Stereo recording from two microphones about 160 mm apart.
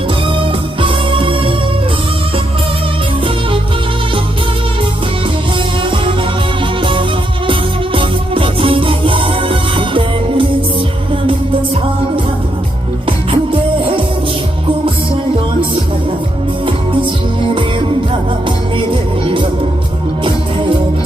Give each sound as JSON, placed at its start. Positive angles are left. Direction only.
{"t": 0.3, "sound": "music", "side_deg": -30}
{"t": 5.8, "sound": "music", "side_deg": -30}
{"t": 7.9, "sound": "music", "side_deg": -35}
{"t": 16.6, "sound": "music", "side_deg": -30}